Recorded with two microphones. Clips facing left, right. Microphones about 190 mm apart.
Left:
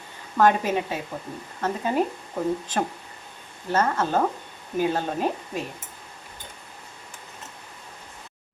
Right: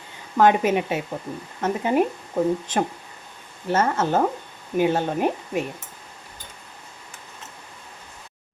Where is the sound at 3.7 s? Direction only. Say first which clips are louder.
Right 2 dB; 20° right (ahead or behind).